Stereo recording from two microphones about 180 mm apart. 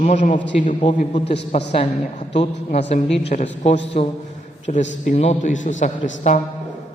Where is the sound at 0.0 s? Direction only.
40° left (ahead or behind).